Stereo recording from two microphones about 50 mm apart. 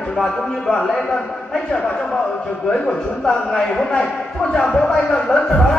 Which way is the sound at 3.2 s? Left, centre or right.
Centre.